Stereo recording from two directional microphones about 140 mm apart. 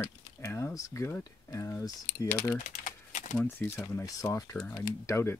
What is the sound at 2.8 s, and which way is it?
Typing, 65° left (ahead or behind).